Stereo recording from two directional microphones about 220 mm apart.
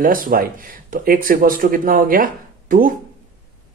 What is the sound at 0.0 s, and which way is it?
Speech, 40° right (ahead or behind).